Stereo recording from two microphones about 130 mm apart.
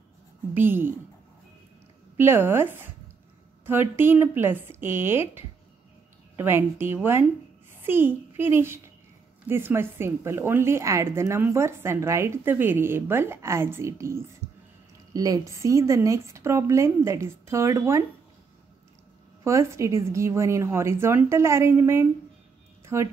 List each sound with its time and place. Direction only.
0.6 s speech: 15° right (ahead or behind)
2.1 s speech: 15° right (ahead or behind)
3.9 s a child's voice: 15° right (ahead or behind)
19.4 s speech: 20° right (ahead or behind)